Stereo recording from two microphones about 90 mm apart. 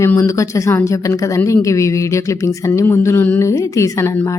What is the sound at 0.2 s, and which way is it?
A woman's voice, 35° left (ahead or behind).